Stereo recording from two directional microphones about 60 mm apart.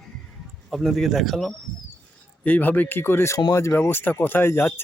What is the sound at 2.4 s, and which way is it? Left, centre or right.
Speech, left.